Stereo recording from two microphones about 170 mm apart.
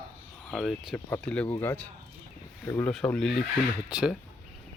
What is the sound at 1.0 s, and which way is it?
Speech, 10° left (ahead or behind).